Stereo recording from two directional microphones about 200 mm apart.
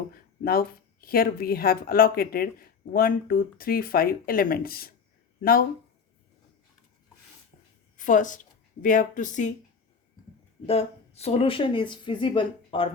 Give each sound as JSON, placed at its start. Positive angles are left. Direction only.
{"t": 0.1, "sound": "a sound", "side_deg": 50}
{"t": 1.0, "sound": "speech", "side_deg": 50}
{"t": 7.9, "sound": "a woman's voice", "side_deg": 40}
{"t": 10.7, "sound": "speech", "side_deg": 30}